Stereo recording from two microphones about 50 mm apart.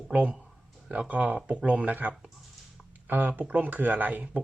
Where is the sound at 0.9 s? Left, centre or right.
Right.